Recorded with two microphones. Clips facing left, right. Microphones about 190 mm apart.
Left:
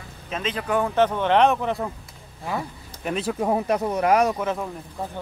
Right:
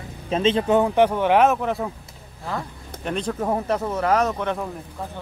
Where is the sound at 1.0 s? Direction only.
10° right (ahead or behind).